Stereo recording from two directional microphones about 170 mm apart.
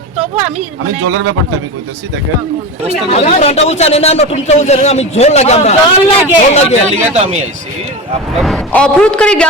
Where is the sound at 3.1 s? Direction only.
40° left (ahead or behind).